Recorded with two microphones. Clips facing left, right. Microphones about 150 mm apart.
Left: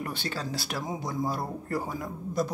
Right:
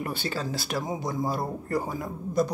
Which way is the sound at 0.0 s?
5° right (ahead or behind).